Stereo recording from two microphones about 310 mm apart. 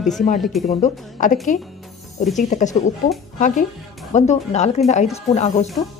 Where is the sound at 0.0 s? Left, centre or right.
Centre.